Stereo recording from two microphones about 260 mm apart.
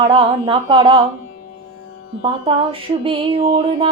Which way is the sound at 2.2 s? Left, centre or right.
Right.